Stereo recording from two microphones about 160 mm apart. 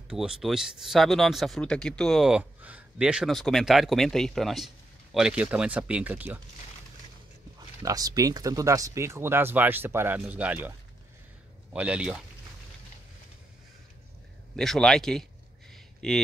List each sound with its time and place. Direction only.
0.1 s speech: 5° right (ahead or behind)
7.8 s speech: 20° right (ahead or behind)
11.7 s speech: 5° right (ahead or behind)
14.6 s speech: 5° left (ahead or behind)
15.7 s a sound: 5° left (ahead or behind)